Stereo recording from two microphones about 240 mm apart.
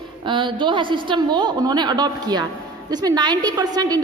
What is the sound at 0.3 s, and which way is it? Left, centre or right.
A woman's voice, centre.